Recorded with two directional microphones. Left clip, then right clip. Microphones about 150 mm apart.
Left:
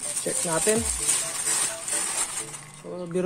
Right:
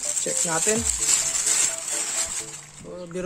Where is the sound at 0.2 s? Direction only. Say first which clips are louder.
Right 1 dB; 25° right (ahead or behind).